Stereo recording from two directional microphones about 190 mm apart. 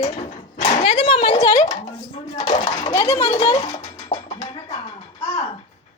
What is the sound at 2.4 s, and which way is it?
Speech, 35° left (ahead or behind).